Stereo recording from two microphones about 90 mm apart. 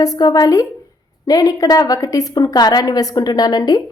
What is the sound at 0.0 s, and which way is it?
A woman's voice, 45° left (ahead or behind).